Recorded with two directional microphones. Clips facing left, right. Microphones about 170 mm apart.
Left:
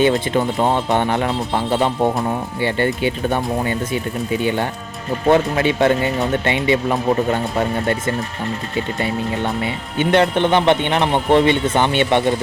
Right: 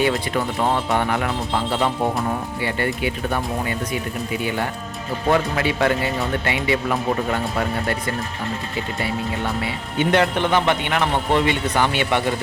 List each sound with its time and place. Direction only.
0.0 s speech: 25° left (ahead or behind)
10.2 s speech: 25° left (ahead or behind)